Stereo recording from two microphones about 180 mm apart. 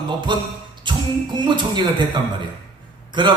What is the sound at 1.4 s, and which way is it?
A man's voice, 25° right (ahead or behind).